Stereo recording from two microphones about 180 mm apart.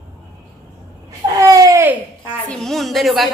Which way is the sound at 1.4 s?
20° right (ahead or behind).